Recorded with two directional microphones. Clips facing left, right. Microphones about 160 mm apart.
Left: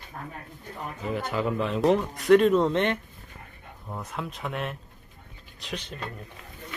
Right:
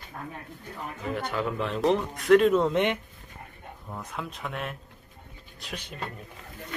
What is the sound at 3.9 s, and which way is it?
Speech, centre (ahead or behind).